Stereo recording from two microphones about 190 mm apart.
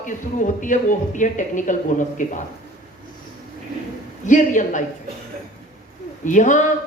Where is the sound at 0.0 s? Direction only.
40° left (ahead or behind).